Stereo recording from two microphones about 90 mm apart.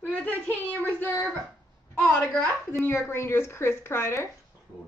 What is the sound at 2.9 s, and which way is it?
Speech, 30° left (ahead or behind).